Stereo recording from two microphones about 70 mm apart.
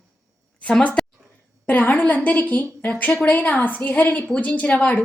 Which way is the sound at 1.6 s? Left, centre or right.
Left.